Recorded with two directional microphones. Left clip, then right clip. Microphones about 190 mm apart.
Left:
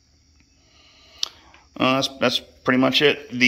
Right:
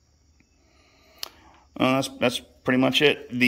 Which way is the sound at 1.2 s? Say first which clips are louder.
Left 9 dB; 25° right (ahead or behind).